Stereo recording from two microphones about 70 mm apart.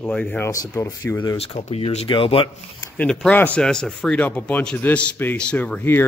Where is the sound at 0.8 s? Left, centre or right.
Left.